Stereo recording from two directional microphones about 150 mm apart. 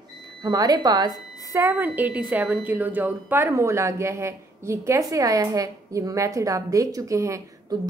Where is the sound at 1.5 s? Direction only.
15° right (ahead or behind).